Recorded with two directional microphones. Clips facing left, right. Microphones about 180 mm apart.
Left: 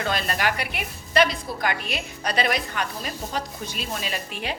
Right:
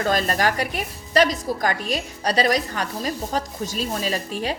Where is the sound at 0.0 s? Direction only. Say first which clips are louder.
Right 4 dB; 40° right (ahead or behind).